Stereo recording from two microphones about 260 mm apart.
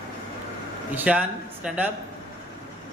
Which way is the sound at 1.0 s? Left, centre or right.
Centre.